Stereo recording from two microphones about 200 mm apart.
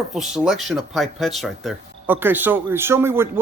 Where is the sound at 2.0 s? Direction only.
10° right (ahead or behind).